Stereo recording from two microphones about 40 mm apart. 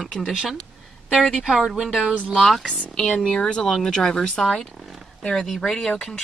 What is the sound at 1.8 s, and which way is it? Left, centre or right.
Speech, centre.